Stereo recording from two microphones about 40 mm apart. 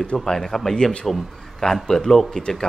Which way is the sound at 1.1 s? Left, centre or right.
Centre.